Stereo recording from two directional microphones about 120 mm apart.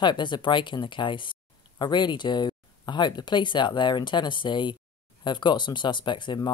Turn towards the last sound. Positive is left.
turn(degrees=40)  # may be behind; listen again after turning